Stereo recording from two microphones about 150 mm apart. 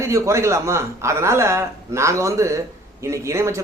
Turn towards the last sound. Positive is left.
turn(degrees=-20)  # may be behind; listen again after turning